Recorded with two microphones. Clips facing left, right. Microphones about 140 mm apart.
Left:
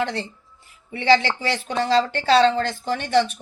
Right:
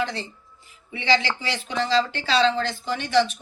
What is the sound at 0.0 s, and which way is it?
Speech, 60° left (ahead or behind).